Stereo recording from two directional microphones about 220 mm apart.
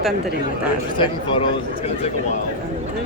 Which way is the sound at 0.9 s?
25° left (ahead or behind).